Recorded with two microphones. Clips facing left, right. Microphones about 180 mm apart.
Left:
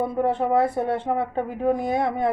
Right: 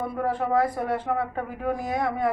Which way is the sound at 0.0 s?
25° left (ahead or behind).